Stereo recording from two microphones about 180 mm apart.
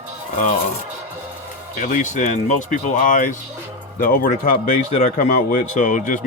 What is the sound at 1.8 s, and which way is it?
Speech, 45° left (ahead or behind).